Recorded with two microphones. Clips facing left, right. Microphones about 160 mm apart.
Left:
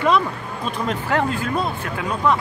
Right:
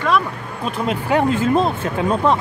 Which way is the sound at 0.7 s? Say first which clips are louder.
Right 3 dB; 10° right (ahead or behind).